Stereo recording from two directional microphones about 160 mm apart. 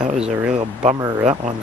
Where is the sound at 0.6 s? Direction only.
35° right (ahead or behind).